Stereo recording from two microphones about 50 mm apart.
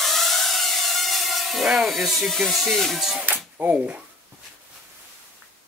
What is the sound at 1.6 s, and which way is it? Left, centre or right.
Speech, centre.